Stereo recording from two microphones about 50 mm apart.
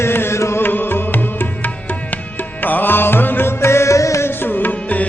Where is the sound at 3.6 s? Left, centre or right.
Left.